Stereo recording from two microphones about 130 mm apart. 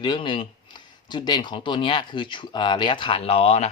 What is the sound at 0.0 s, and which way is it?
Speech, 35° left (ahead or behind).